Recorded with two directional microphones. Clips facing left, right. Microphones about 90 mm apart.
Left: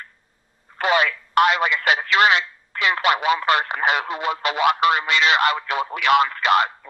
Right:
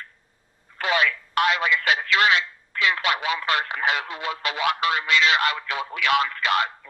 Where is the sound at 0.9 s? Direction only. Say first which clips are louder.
Left 4 dB; 55° left (ahead or behind).